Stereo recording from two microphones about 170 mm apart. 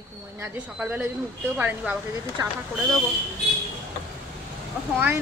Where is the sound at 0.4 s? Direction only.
10° right (ahead or behind).